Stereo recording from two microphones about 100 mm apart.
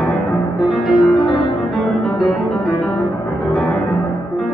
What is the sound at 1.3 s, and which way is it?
Music, 50° left (ahead or behind).